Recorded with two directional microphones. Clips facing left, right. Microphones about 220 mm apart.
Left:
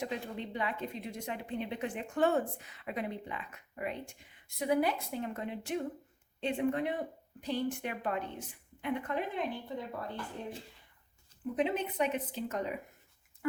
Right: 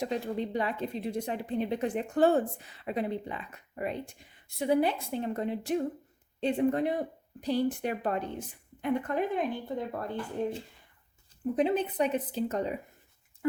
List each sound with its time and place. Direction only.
0.0 s speech: 40° right (ahead or behind)
11.5 s speech: 35° right (ahead or behind)
13.4 s a sound: 25° right (ahead or behind)